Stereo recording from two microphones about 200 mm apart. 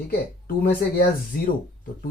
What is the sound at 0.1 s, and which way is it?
Speech, 50° left (ahead or behind).